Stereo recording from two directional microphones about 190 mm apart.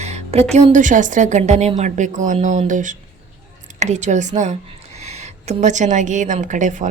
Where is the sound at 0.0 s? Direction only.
35° right (ahead or behind).